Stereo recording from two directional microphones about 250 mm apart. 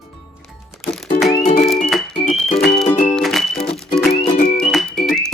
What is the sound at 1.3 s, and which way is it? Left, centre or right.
Music, left.